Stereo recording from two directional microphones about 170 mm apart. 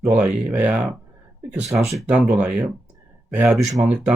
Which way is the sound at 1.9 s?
5° right (ahead or behind).